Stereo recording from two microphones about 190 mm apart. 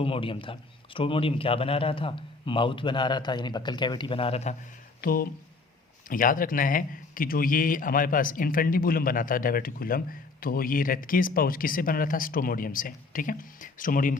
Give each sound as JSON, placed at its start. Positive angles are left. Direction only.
{"t": 0.0, "sound": "a man's voice", "side_deg": 30}
{"t": 4.9, "sound": "speech", "side_deg": 50}